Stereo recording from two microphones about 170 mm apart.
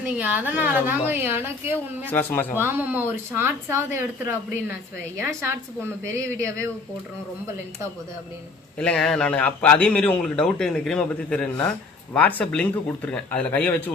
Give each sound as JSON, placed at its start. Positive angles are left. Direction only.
{"t": 0.2, "sound": "a woman's voice", "side_deg": -10}
{"t": 2.0, "sound": "speech", "side_deg": 10}
{"t": 2.6, "sound": "a woman's voice", "side_deg": -10}
{"t": 8.8, "sound": "a man's voice", "side_deg": 5}